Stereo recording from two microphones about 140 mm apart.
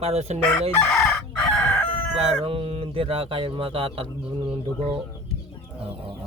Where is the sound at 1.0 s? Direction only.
5° left (ahead or behind).